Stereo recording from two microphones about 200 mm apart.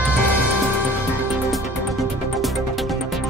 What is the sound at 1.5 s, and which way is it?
Music, centre (ahead or behind).